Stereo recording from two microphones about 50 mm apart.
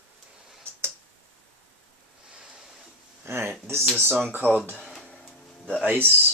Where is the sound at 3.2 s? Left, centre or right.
Right.